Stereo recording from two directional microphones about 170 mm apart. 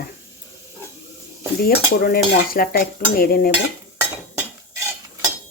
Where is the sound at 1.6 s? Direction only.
60° left (ahead or behind).